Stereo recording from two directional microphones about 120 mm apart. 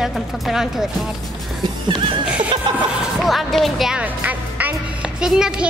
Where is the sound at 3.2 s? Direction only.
Centre (ahead or behind).